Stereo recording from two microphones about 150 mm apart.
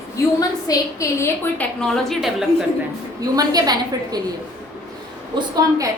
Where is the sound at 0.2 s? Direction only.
20° left (ahead or behind).